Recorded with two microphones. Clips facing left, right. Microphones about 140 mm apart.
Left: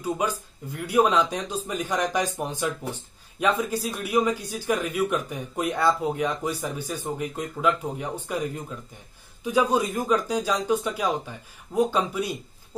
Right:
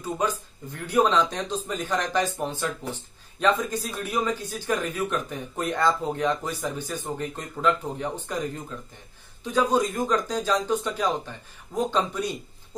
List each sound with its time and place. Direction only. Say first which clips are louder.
0.0 s speech: left 1 dB; 10° left (ahead or behind)